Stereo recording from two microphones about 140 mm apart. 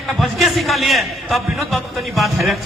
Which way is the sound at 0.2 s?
Centre (ahead or behind).